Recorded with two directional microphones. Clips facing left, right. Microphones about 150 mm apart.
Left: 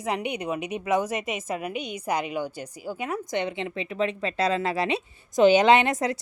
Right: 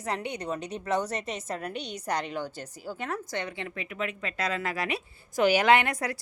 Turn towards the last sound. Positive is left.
turn(degrees=20)  # may be behind; listen again after turning